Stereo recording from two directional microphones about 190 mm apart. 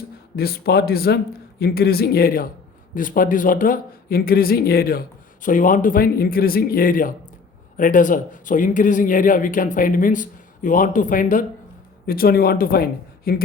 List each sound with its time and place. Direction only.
0.3 s speech: 55° left (ahead or behind)